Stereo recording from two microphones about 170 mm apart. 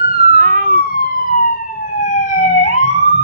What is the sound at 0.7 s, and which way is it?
Police car, 60° left (ahead or behind).